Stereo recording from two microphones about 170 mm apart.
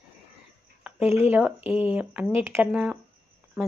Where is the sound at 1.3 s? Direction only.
5° right (ahead or behind).